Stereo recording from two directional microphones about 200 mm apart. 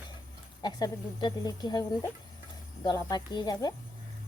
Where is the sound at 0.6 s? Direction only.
20° left (ahead or behind).